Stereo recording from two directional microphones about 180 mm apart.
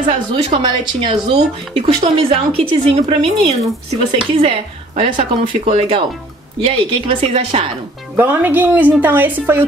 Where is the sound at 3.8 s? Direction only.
30° right (ahead or behind).